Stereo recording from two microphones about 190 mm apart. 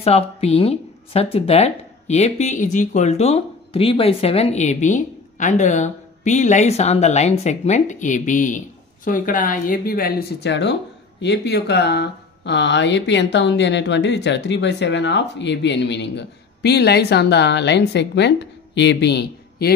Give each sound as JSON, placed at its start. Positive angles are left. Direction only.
{"t": 0.0, "sound": "speech", "side_deg": 30}